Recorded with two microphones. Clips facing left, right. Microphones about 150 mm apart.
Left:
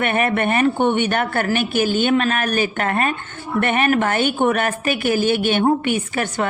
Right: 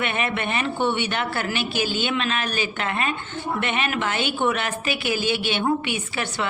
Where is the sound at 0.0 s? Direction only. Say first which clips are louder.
Left 7 dB; 50° left (ahead or behind).